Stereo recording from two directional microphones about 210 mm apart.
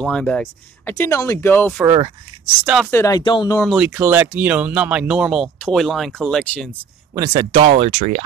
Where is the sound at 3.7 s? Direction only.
10° right (ahead or behind).